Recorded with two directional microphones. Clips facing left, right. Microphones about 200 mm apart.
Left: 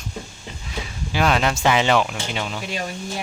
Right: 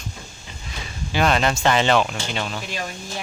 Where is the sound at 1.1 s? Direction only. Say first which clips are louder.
Even; 5° left (ahead or behind).